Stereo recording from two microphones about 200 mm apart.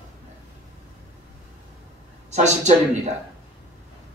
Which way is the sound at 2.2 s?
35° right (ahead or behind).